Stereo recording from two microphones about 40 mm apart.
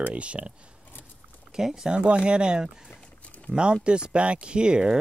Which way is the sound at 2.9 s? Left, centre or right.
Left.